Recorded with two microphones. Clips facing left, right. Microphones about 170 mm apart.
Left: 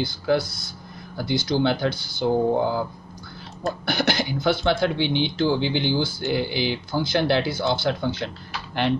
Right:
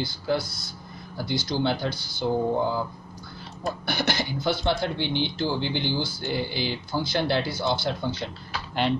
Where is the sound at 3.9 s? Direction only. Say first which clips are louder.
Left 4 dB; 55° left (ahead or behind).